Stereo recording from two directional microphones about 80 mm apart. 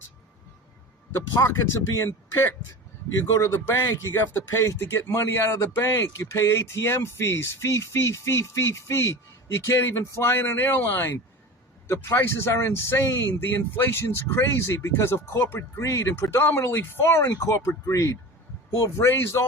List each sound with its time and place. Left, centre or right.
1.4 s speech: left
15.8 s speech: left
17.2 s speech: left
18.9 s speech: left